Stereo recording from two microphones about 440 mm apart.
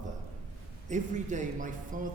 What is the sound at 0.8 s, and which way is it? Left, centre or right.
Speech, centre.